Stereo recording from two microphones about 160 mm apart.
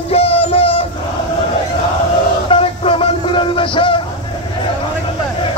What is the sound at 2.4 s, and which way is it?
Music, 35° left (ahead or behind).